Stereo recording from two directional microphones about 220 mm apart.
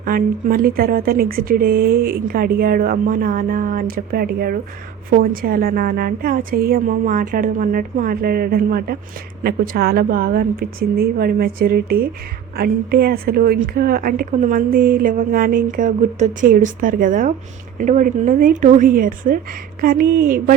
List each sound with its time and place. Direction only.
0.0 s a woman's voice: 40° right (ahead or behind)